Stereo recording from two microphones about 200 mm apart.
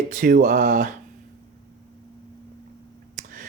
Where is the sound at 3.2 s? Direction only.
40° right (ahead or behind).